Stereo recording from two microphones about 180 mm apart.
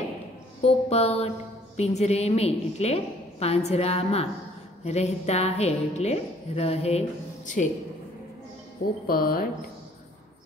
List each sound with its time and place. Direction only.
0.6 s music: 35° left (ahead or behind)
1.8 s a woman's voice: 35° left (ahead or behind)
9.0 s speech: 55° left (ahead or behind)